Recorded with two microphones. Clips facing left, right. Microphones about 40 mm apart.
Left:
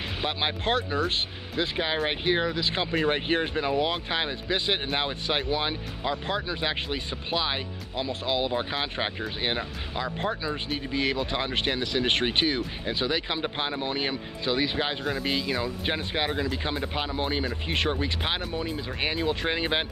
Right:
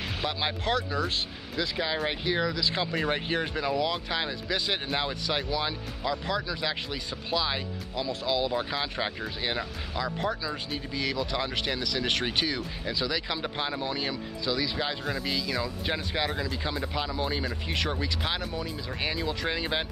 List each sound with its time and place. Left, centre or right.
0.3 s speech: left